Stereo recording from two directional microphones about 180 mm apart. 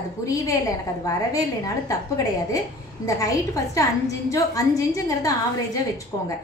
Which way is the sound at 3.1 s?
20° left (ahead or behind).